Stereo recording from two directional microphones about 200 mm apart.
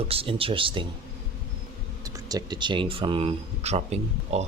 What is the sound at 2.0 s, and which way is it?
Speech, 15° right (ahead or behind).